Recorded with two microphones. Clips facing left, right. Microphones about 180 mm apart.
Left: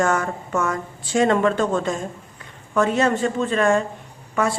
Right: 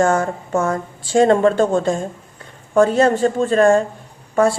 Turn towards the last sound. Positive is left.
turn(degrees=-30)  # may be behind; listen again after turning